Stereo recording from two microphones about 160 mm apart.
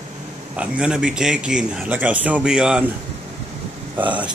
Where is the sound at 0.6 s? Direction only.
5° right (ahead or behind).